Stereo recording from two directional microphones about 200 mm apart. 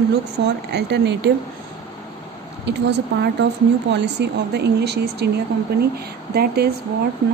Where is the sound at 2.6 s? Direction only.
60° right (ahead or behind).